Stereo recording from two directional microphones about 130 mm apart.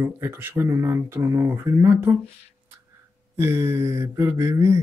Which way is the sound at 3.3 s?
20° right (ahead or behind).